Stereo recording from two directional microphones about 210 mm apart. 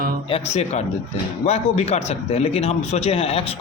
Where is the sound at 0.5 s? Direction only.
30° left (ahead or behind).